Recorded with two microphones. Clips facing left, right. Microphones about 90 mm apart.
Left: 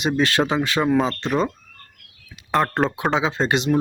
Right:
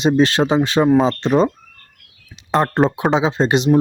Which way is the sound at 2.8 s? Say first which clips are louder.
Right 5 dB; 5° right (ahead or behind).